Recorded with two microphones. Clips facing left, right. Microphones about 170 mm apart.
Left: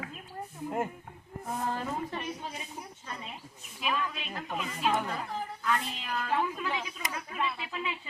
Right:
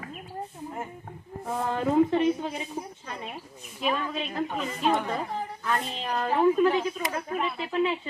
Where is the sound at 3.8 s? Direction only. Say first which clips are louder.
Right 5 dB; 35° right (ahead or behind).